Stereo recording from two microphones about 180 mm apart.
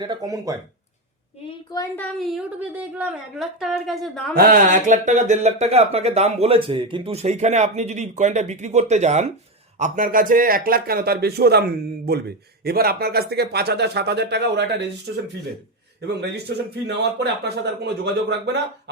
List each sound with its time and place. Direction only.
0.0 s speech: 25° right (ahead or behind)
1.5 s a sound: 20° left (ahead or behind)
2.0 s a woman's voice: centre (ahead or behind)
4.4 s speech: 50° right (ahead or behind); by 15.2 s 70° right (ahead or behind)
16.8 s speech: 70° right (ahead or behind)